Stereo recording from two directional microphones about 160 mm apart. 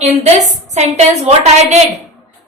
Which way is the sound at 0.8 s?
45° right (ahead or behind).